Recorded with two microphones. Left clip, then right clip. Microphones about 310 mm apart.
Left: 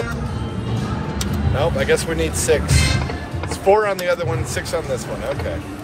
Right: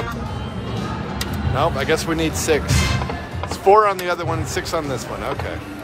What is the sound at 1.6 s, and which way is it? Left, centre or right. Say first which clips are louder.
Speech: left 1 dB; centre.